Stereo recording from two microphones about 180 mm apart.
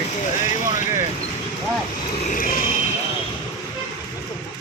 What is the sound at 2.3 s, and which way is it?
Vehicle, 50° left (ahead or behind).